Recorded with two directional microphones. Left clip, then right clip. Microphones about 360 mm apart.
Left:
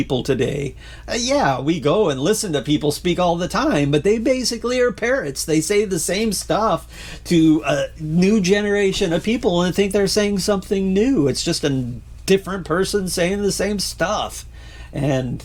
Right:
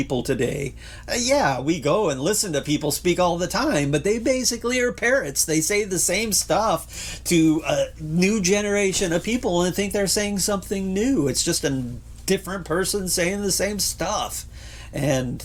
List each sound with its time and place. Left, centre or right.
0.0 s speech: left
8.3 s speech: left